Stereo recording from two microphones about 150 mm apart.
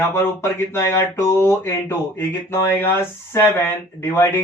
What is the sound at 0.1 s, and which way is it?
Speech, 15° left (ahead or behind).